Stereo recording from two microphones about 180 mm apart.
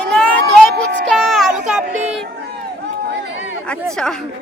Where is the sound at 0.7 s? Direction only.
65° right (ahead or behind).